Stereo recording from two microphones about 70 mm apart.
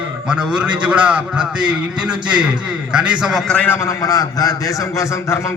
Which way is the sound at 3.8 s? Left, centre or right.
Left.